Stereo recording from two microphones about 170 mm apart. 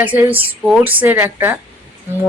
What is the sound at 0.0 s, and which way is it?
A woman's voice, 10° right (ahead or behind).